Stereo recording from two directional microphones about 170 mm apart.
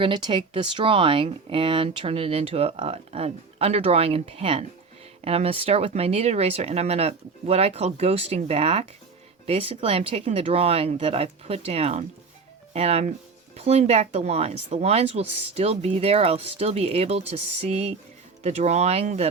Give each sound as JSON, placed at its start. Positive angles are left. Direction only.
{"t": 0.0, "sound": "speech", "side_deg": -30}